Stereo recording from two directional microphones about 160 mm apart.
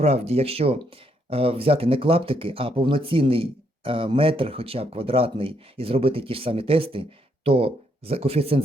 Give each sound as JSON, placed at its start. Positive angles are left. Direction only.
{"t": 0.0, "sound": "speech", "side_deg": -40}